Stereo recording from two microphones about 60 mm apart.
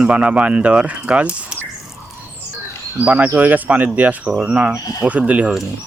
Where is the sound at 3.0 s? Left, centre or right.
Right.